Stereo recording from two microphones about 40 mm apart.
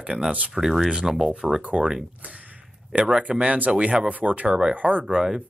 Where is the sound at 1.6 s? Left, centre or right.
Right.